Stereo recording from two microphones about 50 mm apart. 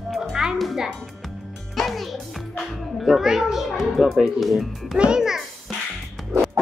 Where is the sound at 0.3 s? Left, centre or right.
Centre.